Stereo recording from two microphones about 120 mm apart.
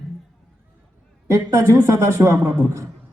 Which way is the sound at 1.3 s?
25° right (ahead or behind).